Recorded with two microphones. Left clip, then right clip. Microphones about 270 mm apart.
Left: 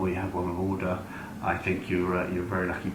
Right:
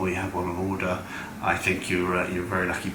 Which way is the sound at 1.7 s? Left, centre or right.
Centre.